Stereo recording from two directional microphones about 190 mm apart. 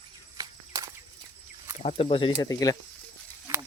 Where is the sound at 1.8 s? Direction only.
30° left (ahead or behind).